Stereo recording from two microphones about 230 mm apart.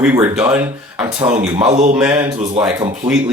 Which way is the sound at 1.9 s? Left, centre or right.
Centre.